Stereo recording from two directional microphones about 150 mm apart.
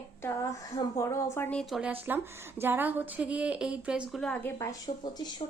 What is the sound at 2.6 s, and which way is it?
A woman's voice, 15° right (ahead or behind).